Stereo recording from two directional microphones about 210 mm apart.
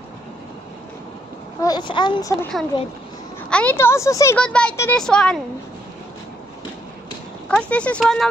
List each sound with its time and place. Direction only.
1.6 s a child's voice: 20° left (ahead or behind)
3.4 s speech: 5° left (ahead or behind)
7.4 s speech: 5° left (ahead or behind)